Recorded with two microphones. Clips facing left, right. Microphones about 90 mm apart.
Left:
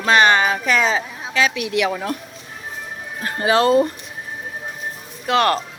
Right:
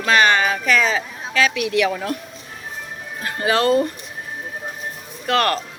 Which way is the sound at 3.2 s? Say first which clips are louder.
Left 2 dB; 25° left (ahead or behind).